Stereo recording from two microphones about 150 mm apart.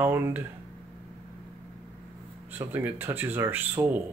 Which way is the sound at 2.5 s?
15° right (ahead or behind).